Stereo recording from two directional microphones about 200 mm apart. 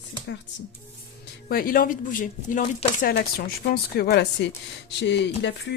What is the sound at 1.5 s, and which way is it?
Speech, 45° left (ahead or behind).